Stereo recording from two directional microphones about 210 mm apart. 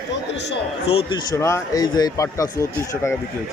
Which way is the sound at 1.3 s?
15° left (ahead or behind).